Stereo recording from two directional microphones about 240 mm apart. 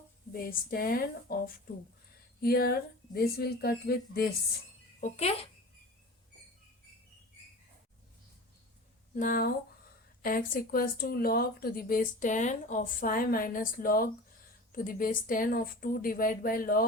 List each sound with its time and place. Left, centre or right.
0.3 s speech: left
4.9 s speech: left
9.1 s speech: left